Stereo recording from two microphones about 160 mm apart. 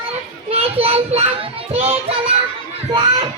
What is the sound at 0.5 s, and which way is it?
Speech, 40° right (ahead or behind).